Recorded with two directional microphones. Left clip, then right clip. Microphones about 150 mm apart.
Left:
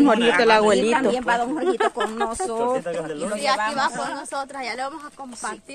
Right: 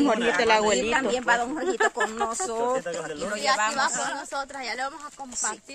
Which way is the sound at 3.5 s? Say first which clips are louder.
Left 2 dB; 35° left (ahead or behind).